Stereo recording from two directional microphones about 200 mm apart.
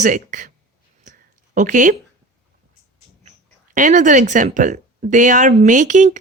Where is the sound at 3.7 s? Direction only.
40° right (ahead or behind).